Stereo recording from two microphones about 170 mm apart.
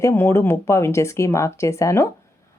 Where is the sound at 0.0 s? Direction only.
15° left (ahead or behind).